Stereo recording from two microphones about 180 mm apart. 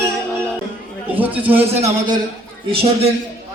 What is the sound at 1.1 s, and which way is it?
Speech, 10° right (ahead or behind).